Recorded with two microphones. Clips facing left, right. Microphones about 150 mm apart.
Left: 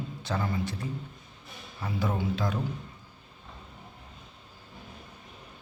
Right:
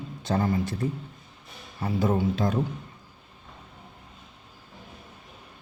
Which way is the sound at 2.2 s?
45° right (ahead or behind).